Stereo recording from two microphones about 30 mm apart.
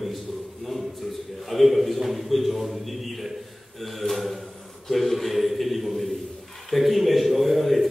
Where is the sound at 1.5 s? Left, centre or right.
Centre.